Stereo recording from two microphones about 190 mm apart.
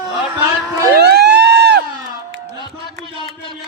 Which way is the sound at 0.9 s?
60° right (ahead or behind).